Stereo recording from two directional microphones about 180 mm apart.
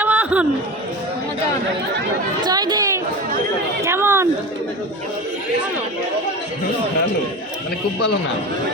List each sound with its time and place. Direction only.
0.0 s chatter: 10° right (ahead or behind)
2.4 s speech: 25° right (ahead or behind)
3.8 s a sound: 15° right (ahead or behind)